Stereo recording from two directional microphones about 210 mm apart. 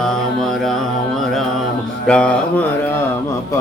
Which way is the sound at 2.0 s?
5° left (ahead or behind).